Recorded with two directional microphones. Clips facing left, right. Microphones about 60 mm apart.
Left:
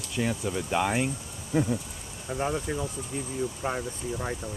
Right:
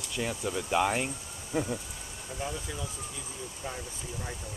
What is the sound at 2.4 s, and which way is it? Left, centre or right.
Speech, left.